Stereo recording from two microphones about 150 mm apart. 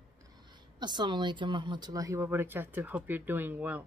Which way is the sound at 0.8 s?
30° right (ahead or behind).